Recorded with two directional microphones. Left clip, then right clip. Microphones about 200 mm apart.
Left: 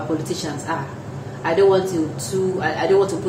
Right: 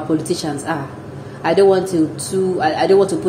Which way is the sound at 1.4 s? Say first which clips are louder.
Right 3 dB; 25° right (ahead or behind).